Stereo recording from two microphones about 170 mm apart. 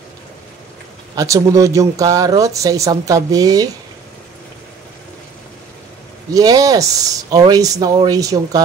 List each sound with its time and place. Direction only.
1.1 s speech: 20° right (ahead or behind)
6.3 s speech: 20° right (ahead or behind)